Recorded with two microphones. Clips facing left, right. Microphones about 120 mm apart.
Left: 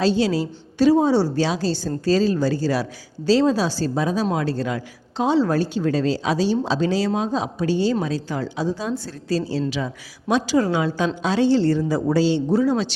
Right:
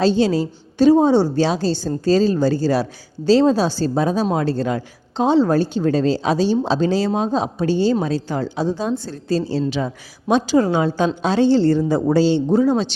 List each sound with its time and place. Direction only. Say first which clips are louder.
0.8 s a woman's voice: right 3 dB; 25° right (ahead or behind)